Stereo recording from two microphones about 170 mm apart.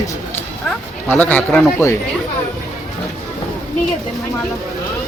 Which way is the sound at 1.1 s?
10° left (ahead or behind).